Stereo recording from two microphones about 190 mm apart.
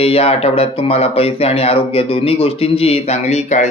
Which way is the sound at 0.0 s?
30° left (ahead or behind).